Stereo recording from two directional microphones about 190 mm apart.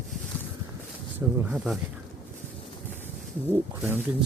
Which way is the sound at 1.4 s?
5° right (ahead or behind).